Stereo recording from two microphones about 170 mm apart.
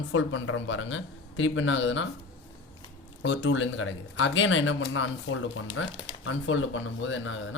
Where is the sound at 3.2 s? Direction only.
90° left.